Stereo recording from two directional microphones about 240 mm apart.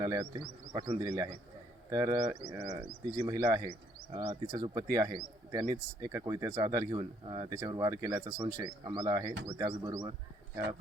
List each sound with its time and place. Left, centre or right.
0.0 s speech: centre